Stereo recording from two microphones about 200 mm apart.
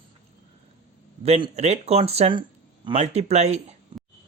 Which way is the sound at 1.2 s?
30° right (ahead or behind).